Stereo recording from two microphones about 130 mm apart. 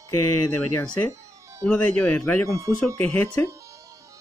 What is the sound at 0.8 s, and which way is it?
Speech, 10° left (ahead or behind).